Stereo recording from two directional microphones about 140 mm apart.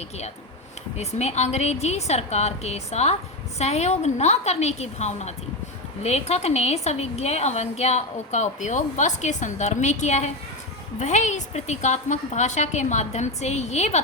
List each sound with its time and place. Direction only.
0.9 s a woman's voice: 50° left (ahead or behind)